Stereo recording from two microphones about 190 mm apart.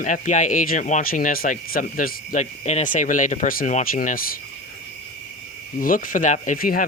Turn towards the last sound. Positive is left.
turn(degrees=50)  # may be behind; listen again after turning